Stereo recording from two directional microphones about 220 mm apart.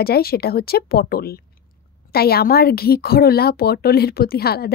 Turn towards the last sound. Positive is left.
turn(degrees=45)  # may be behind; listen again after turning